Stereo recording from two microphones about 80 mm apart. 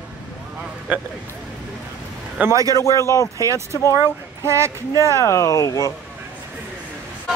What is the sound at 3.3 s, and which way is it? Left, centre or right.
Speech, right.